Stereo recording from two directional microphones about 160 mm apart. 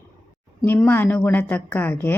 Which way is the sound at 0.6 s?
15° left (ahead or behind).